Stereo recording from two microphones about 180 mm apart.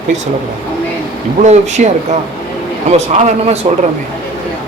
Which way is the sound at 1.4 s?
40° right (ahead or behind).